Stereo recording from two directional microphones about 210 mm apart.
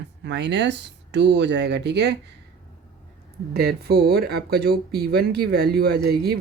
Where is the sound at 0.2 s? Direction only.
55° right (ahead or behind).